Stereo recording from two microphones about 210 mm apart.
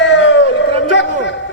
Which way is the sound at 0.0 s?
60° left (ahead or behind).